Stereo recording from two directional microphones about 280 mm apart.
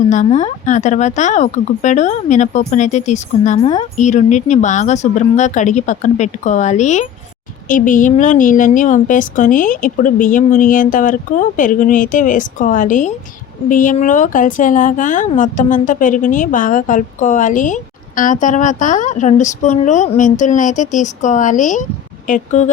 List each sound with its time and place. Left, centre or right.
0.3 s a woman's voice: left